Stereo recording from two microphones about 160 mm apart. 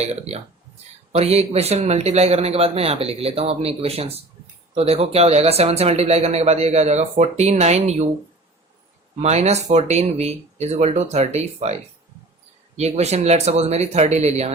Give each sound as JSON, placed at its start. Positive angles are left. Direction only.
{"t": 0.0, "sound": "speech", "side_deg": -40}
{"t": 9.2, "sound": "speech", "side_deg": -45}